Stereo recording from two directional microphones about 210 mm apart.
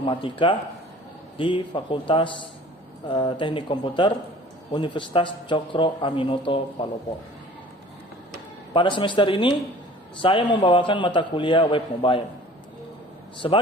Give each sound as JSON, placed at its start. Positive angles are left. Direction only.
{"t": 0.0, "sound": "a man's voice", "side_deg": 25}
{"t": 8.7, "sound": "a man's voice", "side_deg": 25}
{"t": 13.4, "sound": "a man's voice", "side_deg": 25}